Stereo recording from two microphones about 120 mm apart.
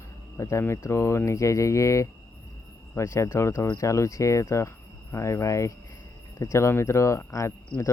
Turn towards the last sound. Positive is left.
turn(degrees=25)  # may be behind; listen again after turning